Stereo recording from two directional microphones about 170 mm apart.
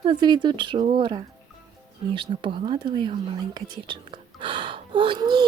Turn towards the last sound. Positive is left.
turn(degrees=-25)  # may be behind; listen again after turning